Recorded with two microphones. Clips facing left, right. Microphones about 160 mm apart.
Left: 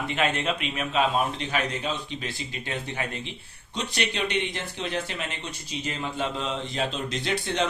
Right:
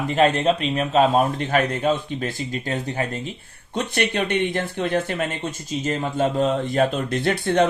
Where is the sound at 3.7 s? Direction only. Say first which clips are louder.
Right 7 dB; 55° right (ahead or behind).